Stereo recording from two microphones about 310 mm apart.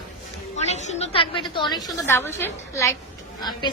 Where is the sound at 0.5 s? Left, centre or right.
Left.